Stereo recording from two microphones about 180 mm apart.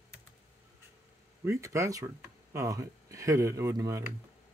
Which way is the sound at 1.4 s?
15° right (ahead or behind).